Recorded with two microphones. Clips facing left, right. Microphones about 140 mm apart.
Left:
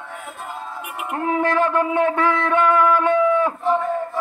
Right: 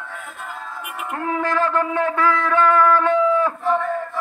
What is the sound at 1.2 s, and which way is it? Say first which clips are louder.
Music: left 2 dB; 25° left (ahead or behind).